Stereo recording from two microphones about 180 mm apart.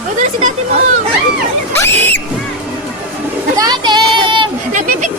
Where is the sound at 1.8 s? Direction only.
15° left (ahead or behind).